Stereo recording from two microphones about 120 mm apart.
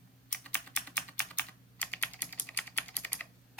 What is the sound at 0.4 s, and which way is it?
Typing, 15° left (ahead or behind).